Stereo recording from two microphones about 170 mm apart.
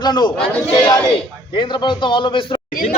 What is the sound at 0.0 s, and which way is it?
Speech, 25° left (ahead or behind).